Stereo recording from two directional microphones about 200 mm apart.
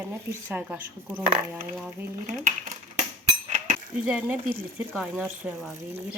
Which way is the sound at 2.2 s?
40° right (ahead or behind).